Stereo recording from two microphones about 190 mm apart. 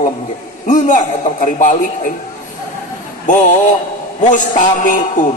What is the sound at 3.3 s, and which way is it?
A man's voice, 40° left (ahead or behind).